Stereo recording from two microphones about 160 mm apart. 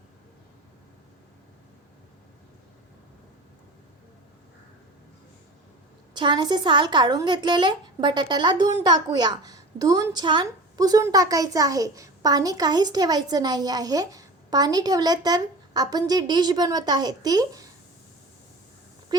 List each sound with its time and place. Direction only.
6.1 s a woman's voice: 30° right (ahead or behind)